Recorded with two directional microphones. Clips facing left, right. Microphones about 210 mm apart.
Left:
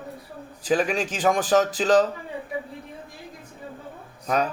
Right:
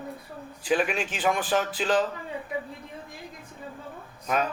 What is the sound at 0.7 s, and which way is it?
A man's voice, 40° left (ahead or behind).